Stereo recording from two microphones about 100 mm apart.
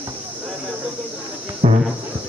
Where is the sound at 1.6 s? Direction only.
70° right (ahead or behind).